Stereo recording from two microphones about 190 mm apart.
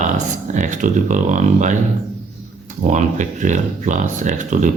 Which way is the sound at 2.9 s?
40° right (ahead or behind).